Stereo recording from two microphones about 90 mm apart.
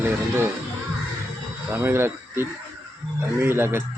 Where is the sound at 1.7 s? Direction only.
30° right (ahead or behind).